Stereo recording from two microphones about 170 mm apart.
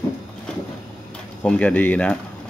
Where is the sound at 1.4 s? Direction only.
10° left (ahead or behind).